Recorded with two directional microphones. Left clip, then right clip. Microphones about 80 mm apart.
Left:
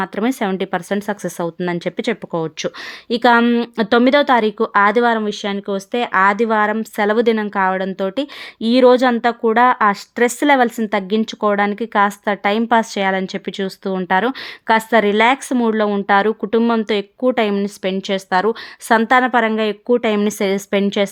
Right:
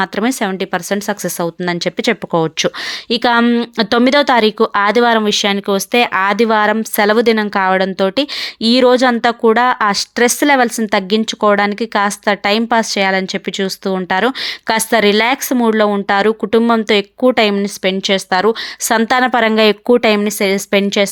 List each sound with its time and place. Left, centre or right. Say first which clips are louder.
0.3 s speech: right 2 dB; centre
2.3 s speech: right 7 dB; right
3.4 s speech: right 2 dB; centre
3.8 s speech: even; right
4.1 s a woman's voice: right 2 dB; right
5.2 s a woman's voice: right 8 dB; right
17.4 s a woman's voice: right 5 dB; right
19.5 s speech: right 6 dB; right
20.0 s a woman's voice: right 5 dB; right
20.2 s a woman's voice: right 3 dB; centre